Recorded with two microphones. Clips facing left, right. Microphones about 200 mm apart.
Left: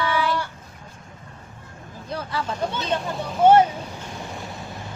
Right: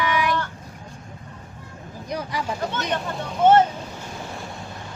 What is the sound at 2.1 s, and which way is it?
Speech, 15° right (ahead or behind).